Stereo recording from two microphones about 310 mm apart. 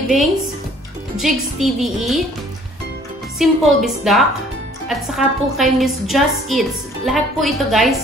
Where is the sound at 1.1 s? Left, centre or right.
Centre.